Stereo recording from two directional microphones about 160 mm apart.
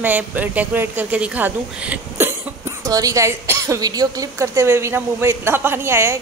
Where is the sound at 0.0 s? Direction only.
10° right (ahead or behind).